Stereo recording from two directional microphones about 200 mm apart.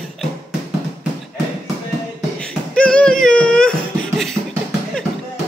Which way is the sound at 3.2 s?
5° left (ahead or behind).